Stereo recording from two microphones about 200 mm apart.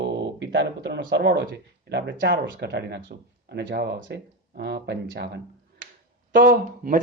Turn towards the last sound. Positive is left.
turn(degrees=-45)  # may be behind; listen again after turning